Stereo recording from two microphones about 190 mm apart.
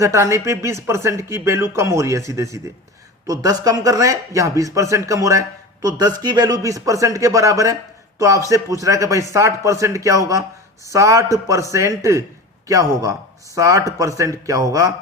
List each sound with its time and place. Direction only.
0.0 s a man's voice: 15° right (ahead or behind)